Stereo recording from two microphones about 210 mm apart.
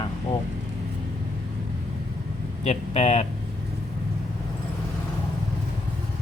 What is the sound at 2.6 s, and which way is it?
Speech, 30° left (ahead or behind).